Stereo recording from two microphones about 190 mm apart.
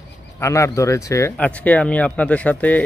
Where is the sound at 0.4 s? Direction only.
15° left (ahead or behind).